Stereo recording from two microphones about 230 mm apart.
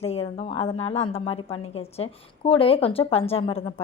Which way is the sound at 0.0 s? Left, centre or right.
Left.